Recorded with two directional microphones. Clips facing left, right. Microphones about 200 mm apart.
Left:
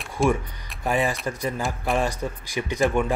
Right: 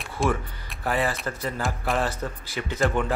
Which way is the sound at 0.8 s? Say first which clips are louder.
Left 2 dB; 15° left (ahead or behind).